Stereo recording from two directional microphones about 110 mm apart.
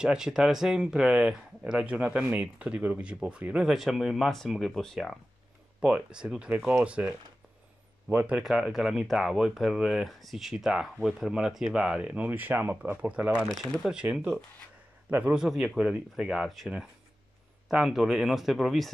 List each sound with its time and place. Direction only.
0.0 s speech: 5° right (ahead or behind)
5.8 s speech: 10° right (ahead or behind)
8.4 s speech: 5° right (ahead or behind)
15.4 s speech: 5° right (ahead or behind)